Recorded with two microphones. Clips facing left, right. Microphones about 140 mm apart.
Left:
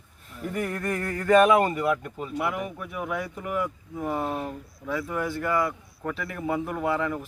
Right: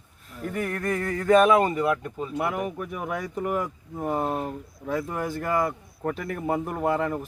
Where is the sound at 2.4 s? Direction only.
45° right (ahead or behind).